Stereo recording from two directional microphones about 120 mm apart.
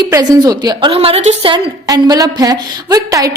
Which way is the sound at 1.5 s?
35° right (ahead or behind).